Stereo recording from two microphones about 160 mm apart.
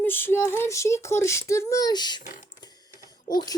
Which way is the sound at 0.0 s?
15° left (ahead or behind).